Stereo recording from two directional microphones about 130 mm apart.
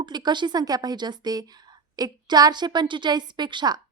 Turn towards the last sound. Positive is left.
turn(degrees=-35)  # may be behind; listen again after turning